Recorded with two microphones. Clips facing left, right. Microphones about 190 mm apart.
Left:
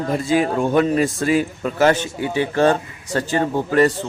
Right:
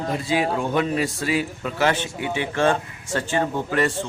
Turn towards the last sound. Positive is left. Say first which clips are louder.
# left 6 dB
turn(degrees=40)  # may be behind; listen again after turning